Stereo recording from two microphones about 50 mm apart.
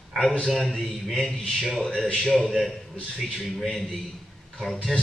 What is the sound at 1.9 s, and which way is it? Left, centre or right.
Speech, centre.